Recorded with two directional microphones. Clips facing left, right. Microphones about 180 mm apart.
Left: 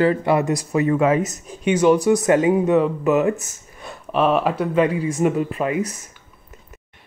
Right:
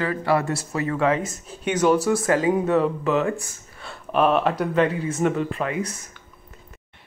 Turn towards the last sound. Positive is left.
turn(degrees=15)  # may be behind; listen again after turning